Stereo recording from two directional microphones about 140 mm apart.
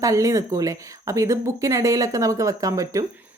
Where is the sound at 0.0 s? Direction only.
20° right (ahead or behind).